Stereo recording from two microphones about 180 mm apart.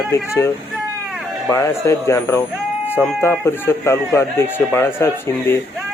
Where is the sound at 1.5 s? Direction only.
15° left (ahead or behind).